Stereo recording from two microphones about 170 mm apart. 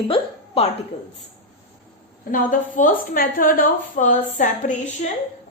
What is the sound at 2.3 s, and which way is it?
A woman's voice, 50° left (ahead or behind).